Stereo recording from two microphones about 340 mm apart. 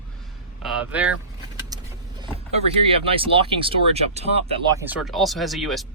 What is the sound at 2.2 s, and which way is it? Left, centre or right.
Speech, centre.